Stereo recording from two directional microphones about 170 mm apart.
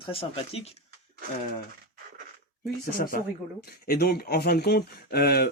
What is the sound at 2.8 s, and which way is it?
Speech, 60° left (ahead or behind).